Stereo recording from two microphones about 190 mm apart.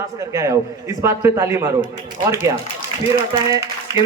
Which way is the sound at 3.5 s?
15° right (ahead or behind).